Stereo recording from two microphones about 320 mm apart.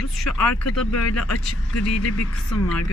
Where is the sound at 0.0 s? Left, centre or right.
Left.